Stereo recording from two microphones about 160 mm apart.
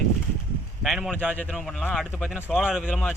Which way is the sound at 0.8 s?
Centre (ahead or behind).